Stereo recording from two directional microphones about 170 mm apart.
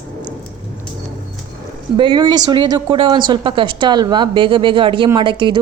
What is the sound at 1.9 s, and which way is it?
Speech, 25° right (ahead or behind).